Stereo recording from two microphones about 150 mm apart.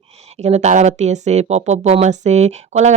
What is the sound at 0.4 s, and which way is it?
Speech, 50° right (ahead or behind).